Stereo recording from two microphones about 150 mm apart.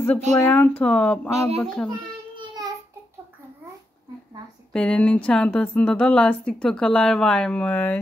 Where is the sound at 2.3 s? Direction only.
25° right (ahead or behind).